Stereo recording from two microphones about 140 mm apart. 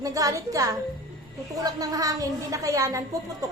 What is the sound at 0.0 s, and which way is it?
A woman's voice, 25° right (ahead or behind).